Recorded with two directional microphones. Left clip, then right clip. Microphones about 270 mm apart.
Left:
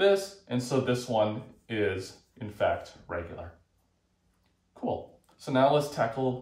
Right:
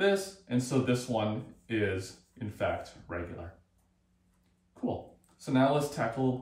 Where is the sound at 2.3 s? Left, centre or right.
Centre.